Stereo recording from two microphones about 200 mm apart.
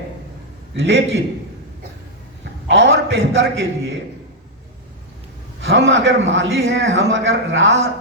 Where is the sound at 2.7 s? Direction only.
65° right (ahead or behind).